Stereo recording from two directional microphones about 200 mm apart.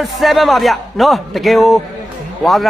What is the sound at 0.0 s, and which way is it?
A man's voice, centre (ahead or behind).